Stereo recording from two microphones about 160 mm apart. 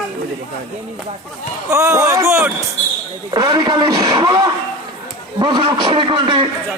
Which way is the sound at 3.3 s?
25° right (ahead or behind).